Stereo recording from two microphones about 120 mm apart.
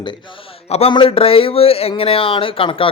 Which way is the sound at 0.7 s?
50° left (ahead or behind).